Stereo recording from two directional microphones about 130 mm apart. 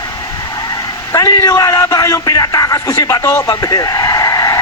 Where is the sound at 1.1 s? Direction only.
25° left (ahead or behind).